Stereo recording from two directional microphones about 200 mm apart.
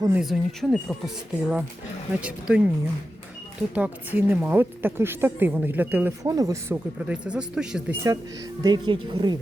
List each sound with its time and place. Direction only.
0.0 s a woman's voice: 5° right (ahead or behind)
3.8 s a woman's voice: 10° right (ahead or behind)
8.6 s speech: 20° right (ahead or behind)